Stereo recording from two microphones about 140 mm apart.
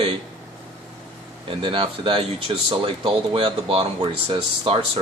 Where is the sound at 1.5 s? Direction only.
35° right (ahead or behind).